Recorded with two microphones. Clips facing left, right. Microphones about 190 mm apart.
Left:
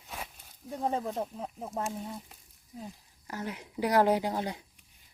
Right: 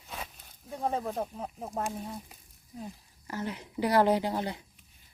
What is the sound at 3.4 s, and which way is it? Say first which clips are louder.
Speech: right 1 dB; 10° left (ahead or behind).